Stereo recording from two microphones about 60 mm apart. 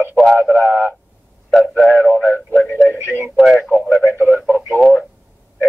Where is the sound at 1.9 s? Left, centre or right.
Left.